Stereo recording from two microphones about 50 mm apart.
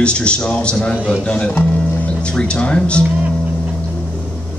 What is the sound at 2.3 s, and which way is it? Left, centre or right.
Speech, left.